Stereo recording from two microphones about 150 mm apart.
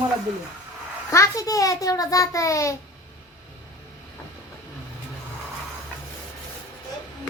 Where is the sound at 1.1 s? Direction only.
20° left (ahead or behind).